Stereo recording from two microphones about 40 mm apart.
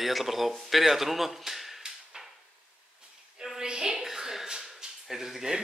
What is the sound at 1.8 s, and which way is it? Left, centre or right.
Drawer open or close, centre.